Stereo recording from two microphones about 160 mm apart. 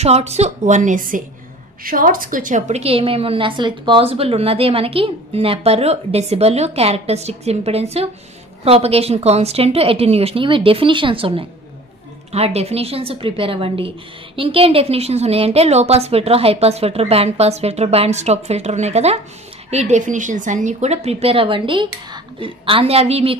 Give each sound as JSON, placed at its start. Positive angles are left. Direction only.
{"t": 0.0, "sound": "a woman's voice", "side_deg": -40}